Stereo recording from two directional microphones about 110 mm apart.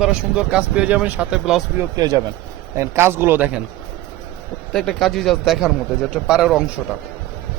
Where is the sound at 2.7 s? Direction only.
25° right (ahead or behind).